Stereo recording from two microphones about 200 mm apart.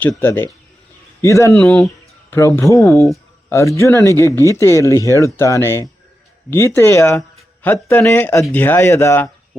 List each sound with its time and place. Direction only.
0.0 s a man's voice: 10° left (ahead or behind)
1.5 s speech: centre (ahead or behind)
2.3 s a man's voice: 15° left (ahead or behind)